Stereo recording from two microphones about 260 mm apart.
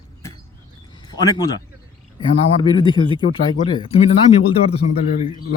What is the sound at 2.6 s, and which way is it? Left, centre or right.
A man's voice, centre.